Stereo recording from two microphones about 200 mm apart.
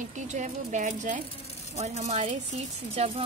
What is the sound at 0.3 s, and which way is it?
Speech, 35° right (ahead or behind).